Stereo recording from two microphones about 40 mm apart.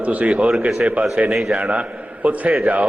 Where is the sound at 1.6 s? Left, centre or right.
Right.